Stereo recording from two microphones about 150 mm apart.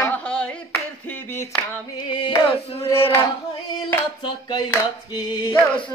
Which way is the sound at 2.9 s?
15° left (ahead or behind).